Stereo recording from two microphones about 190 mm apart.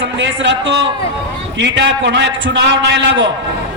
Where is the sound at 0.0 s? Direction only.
70° right (ahead or behind).